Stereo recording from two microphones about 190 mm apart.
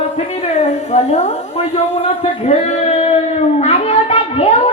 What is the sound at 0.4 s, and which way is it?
Speech, 35° left (ahead or behind).